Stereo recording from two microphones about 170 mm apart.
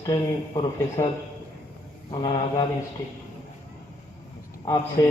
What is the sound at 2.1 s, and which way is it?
Speech, 25° left (ahead or behind).